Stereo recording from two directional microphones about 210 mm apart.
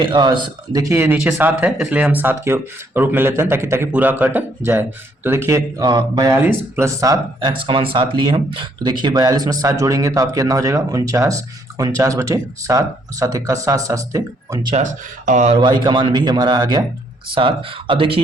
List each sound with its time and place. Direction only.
0.0 s speech: 20° right (ahead or behind)
14.8 s speech: 35° right (ahead or behind)
15.5 s a man's voice: 20° right (ahead or behind)